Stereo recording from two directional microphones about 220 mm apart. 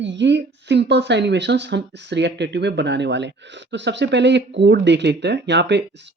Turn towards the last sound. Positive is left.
turn(degrees=-50)  # may be behind; listen again after turning